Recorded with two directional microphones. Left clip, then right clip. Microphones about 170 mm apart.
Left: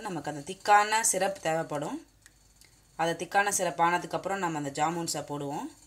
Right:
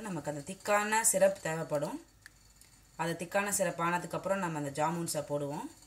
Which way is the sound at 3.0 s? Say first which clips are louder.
Left 6 dB; 45° left (ahead or behind).